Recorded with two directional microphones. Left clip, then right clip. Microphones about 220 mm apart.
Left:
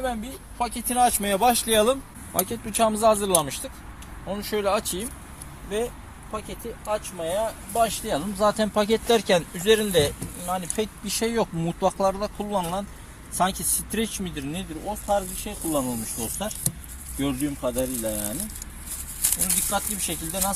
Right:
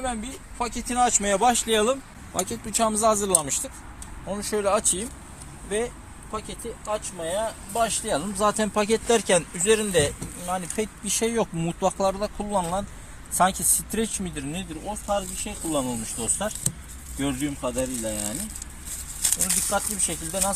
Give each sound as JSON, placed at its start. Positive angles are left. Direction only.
{"t": 0.6, "sound": "speech", "side_deg": 25}
{"t": 2.4, "sound": "speech", "side_deg": 20}
{"t": 6.8, "sound": "speech", "side_deg": -15}
{"t": 16.1, "sound": "speech", "side_deg": -5}
{"t": 18.1, "sound": "speech", "side_deg": 0}